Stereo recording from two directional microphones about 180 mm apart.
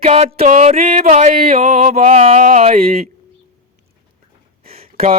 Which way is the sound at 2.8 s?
55° right (ahead or behind).